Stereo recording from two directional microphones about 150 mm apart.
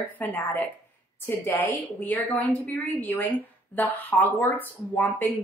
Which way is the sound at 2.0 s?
10° left (ahead or behind).